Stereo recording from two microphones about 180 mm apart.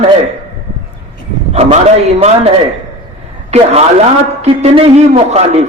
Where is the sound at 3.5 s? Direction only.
35° right (ahead or behind).